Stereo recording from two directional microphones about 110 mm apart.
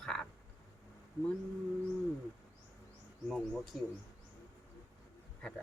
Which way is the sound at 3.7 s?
5° right (ahead or behind).